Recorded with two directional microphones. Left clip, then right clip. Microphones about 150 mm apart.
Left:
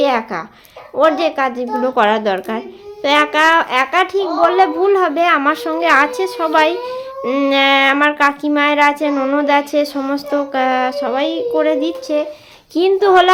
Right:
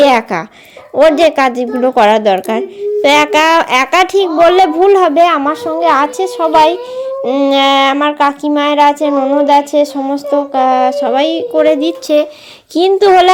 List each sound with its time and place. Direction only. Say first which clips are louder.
0.0 s speech: right 7 dB; 60° right (ahead or behind)
0.9 s a woman's voice: right 6 dB; 45° right (ahead or behind)
1.9 s a woman's voice: right 6 dB; 30° right (ahead or behind); by 4.7 s 55° right (ahead or behind)
4.8 s a woman's voice: right 6 dB; 35° right (ahead or behind)
5.4 s a sound: right 3 dB; 5° right (ahead or behind)
11.1 s a woman's voice: right 5 dB; 30° right (ahead or behind)
12.0 s a woman's voice: right 10 dB; 50° right (ahead or behind)
12.7 s a woman's voice: right 4 dB; 25° right (ahead or behind)